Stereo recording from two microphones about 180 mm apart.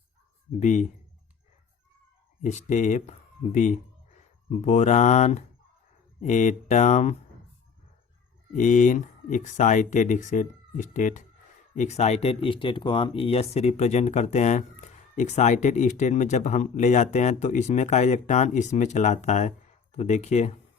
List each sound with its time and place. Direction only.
0.6 s speech: 40° left (ahead or behind)
2.4 s speech: 40° left (ahead or behind)
8.5 s speech: 45° left (ahead or behind)